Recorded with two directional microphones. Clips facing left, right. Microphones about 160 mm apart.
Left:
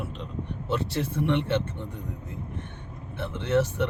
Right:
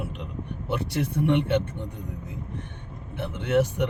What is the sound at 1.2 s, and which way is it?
Speech, 15° right (ahead or behind).